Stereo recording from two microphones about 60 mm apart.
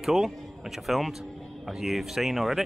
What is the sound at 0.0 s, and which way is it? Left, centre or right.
Speech, centre.